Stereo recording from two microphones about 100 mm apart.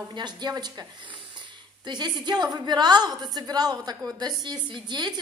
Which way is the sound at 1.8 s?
45° right (ahead or behind).